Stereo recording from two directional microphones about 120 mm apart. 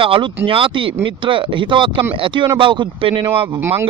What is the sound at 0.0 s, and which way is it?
Speech, 45° right (ahead or behind).